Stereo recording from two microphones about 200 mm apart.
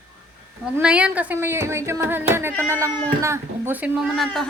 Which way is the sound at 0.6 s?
5° right (ahead or behind).